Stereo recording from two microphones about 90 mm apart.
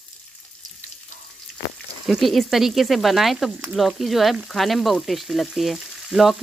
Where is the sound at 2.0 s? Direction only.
Centre (ahead or behind).